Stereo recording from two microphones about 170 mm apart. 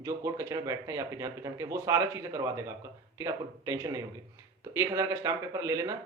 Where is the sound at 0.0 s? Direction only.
15° right (ahead or behind).